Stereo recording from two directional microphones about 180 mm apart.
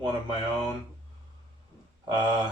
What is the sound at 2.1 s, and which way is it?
Speech, 25° right (ahead or behind).